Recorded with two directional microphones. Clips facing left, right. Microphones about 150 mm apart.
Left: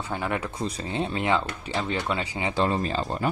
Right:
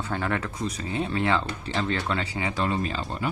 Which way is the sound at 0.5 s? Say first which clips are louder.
Even; 30° left (ahead or behind).